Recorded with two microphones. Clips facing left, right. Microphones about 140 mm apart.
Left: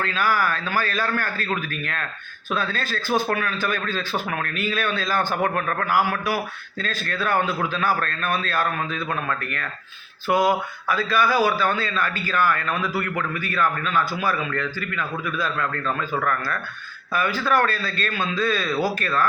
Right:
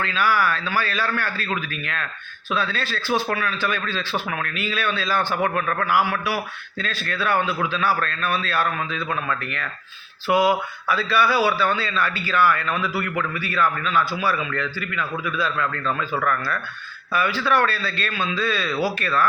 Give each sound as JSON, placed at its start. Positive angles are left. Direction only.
{"t": 0.0, "sound": "speech", "side_deg": 45}
{"t": 10.4, "sound": "speech", "side_deg": 45}